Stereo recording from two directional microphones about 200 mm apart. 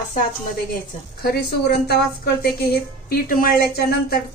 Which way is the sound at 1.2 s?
50° left (ahead or behind).